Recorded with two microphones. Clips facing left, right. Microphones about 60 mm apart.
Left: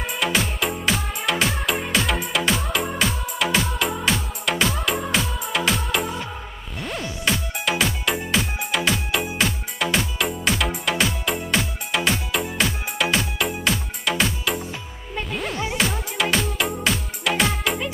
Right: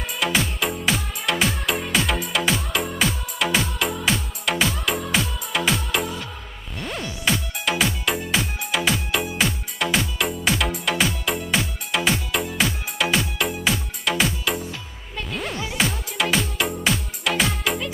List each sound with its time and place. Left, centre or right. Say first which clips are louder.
0.2 s music: even; centre
14.7 s music: left 2 dB; centre
15.3 s music: left 1 dB; centre